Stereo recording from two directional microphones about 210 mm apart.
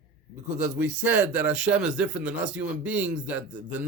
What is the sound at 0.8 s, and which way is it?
A man's voice, 5° right (ahead or behind).